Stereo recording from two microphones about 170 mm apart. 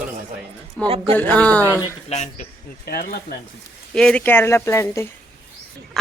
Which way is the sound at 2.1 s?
40° left (ahead or behind).